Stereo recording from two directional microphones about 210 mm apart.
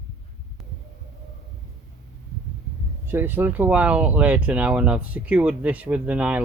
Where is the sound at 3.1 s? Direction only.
10° right (ahead or behind).